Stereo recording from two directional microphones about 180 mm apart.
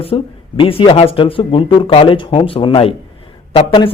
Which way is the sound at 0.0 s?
30° left (ahead or behind).